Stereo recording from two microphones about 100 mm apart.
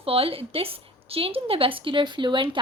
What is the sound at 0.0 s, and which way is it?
A woman's voice, 70° right (ahead or behind).